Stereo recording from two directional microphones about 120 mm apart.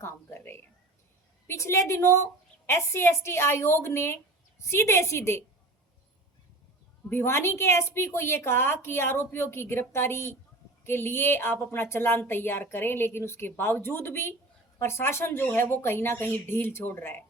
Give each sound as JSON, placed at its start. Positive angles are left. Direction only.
{"t": 0.0, "sound": "a sound", "side_deg": 20}
{"t": 1.5, "sound": "a woman's voice", "side_deg": 25}
{"t": 7.1, "sound": "a woman's voice", "side_deg": 20}